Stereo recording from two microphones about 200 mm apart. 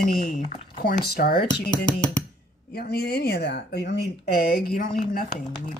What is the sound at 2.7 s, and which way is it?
Speech, 50° left (ahead or behind).